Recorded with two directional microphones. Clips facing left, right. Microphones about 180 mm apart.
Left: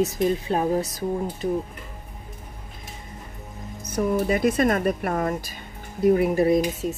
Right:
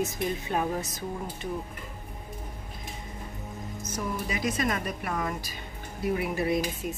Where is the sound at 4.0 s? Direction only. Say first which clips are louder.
Left 11 dB; 50° left (ahead or behind); by 7.0 s 35° left (ahead or behind).